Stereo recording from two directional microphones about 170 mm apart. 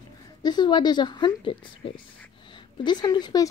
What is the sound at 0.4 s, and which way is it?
Speech, 25° left (ahead or behind).